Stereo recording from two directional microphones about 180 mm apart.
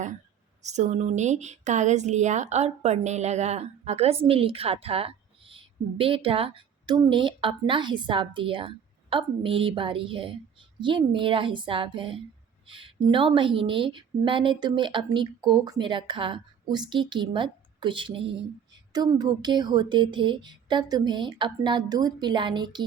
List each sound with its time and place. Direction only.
0.6 s a woman's voice: 40° right (ahead or behind); by 22.8 s 25° right (ahead or behind)